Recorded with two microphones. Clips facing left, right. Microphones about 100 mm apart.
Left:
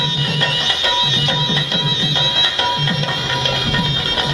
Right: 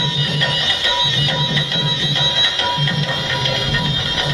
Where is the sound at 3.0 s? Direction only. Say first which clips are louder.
Left 1 dB; 35° left (ahead or behind).